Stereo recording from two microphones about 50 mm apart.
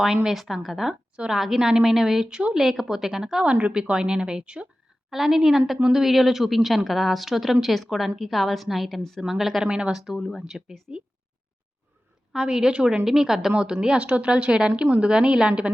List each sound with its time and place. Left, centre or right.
0.3 s a woman's voice: centre
3.4 s a woman's voice: right
5.1 s a woman's voice: centre
9.2 s a woman's voice: centre
9.6 s a woman's voice: centre
12.3 s a woman's voice: centre